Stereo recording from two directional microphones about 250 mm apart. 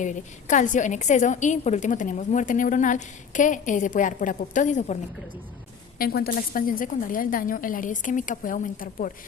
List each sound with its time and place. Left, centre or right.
0.0 s a woman's voice: left
6.0 s a woman's voice: left